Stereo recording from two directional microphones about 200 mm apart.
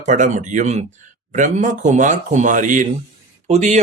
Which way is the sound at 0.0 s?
40° right (ahead or behind).